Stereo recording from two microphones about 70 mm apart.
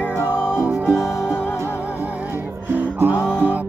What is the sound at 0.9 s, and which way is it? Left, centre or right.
Music, left.